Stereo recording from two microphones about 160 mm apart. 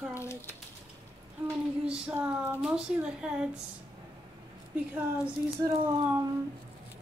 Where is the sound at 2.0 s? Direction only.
10° right (ahead or behind).